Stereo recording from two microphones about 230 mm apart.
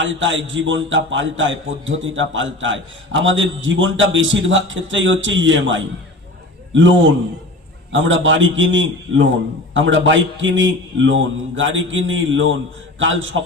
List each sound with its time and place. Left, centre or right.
0.0 s a man's voice: right